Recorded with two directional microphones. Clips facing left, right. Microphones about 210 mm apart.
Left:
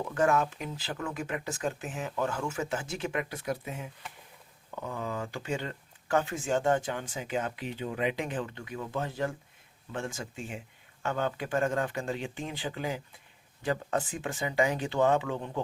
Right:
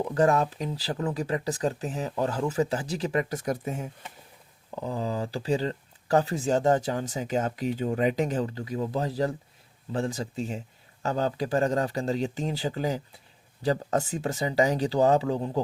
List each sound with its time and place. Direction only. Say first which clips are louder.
0.1 s speech: right 3 dB; 35° right (ahead or behind)
4.7 s speech: right 5 dB; 30° right (ahead or behind)